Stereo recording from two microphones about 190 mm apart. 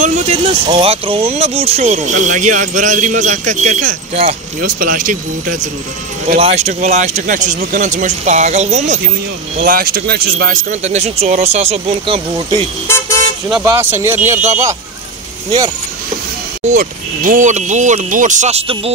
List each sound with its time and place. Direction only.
0.0 s speech: 35° right (ahead or behind)
4.6 s speech: 45° right (ahead or behind)
6.3 s speech: 35° right (ahead or behind)
9.6 s speech: 50° right (ahead or behind); by 12.6 s 30° right (ahead or behind)
12.8 s speech: 15° left (ahead or behind)
13.7 s speech: 10° right (ahead or behind)
16.6 s speech: 40° right (ahead or behind)